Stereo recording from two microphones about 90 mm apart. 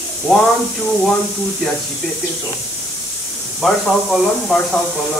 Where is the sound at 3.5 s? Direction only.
Centre (ahead or behind).